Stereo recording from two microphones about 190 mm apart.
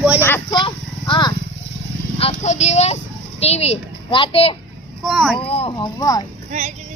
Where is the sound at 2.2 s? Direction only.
35° left (ahead or behind).